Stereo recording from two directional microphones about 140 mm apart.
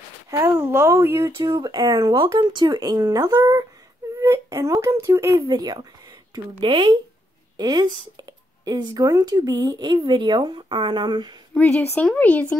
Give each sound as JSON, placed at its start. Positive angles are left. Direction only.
{"t": 0.3, "sound": "speech", "side_deg": -20}
{"t": 5.5, "sound": "speech", "side_deg": -30}
{"t": 11.5, "sound": "speech", "side_deg": 10}